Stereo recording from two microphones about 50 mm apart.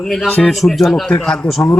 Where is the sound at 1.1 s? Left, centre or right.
Centre.